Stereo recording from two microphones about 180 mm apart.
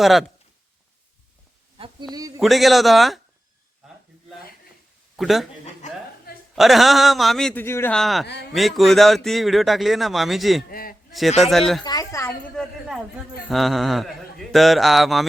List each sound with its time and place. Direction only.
0.0 s a man's voice: centre (ahead or behind)
2.1 s a sound: 20° right (ahead or behind)
2.4 s a man's voice: centre (ahead or behind)
5.1 s speech: centre (ahead or behind)
6.6 s a man's voice: centre (ahead or behind)
10.7 s a man's voice: 55° left (ahead or behind)
11.3 s a man's voice: centre (ahead or behind)
11.8 s speech: 20° left (ahead or behind)
13.5 s a man's voice: centre (ahead or behind)